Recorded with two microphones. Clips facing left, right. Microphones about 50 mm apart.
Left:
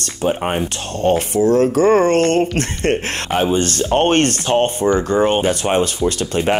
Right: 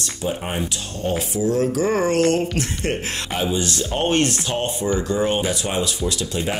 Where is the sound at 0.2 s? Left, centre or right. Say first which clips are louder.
Left 7 dB; left.